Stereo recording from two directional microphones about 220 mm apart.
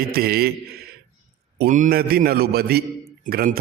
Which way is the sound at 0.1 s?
45° right (ahead or behind).